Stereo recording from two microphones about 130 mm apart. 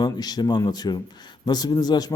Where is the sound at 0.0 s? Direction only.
30° left (ahead or behind).